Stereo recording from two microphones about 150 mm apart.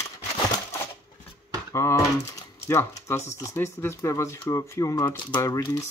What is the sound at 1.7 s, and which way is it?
Speech, 20° left (ahead or behind).